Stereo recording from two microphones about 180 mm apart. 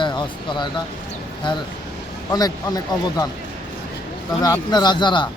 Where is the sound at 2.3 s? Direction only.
20° left (ahead or behind).